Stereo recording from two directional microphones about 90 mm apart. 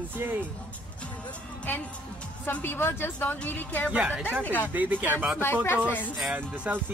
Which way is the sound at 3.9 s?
15° right (ahead or behind).